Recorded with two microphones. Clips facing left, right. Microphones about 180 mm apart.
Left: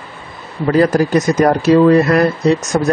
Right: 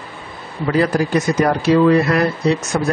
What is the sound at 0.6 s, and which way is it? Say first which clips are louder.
Speech: left 4 dB; 45° left (ahead or behind).